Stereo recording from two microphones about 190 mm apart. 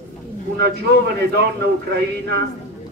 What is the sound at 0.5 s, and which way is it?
A man's voice, 60° right (ahead or behind).